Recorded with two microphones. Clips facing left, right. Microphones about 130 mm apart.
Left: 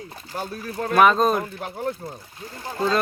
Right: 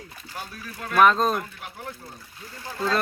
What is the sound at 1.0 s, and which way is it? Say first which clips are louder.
Speech: left 2 dB; 5° left (ahead or behind).